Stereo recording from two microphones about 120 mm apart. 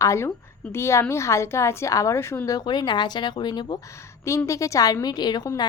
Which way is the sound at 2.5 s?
35° left (ahead or behind).